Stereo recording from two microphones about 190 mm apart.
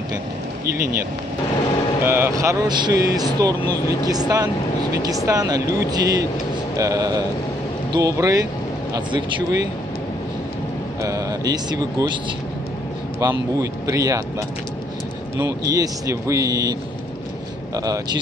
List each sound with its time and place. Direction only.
2.0 s speech: 15° right (ahead or behind)
11.0 s speech: 15° right (ahead or behind)
13.2 s speech: 15° right (ahead or behind)
15.3 s speech: 15° right (ahead or behind)
17.7 s speech: 20° right (ahead or behind)